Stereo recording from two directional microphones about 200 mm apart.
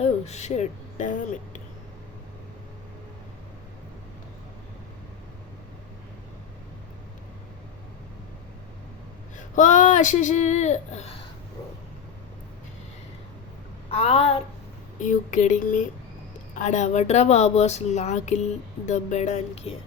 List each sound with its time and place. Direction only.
0.0 s speech: 35° left (ahead or behind)
9.6 s speech: 40° left (ahead or behind)
13.9 s a woman's voice: 30° left (ahead or behind)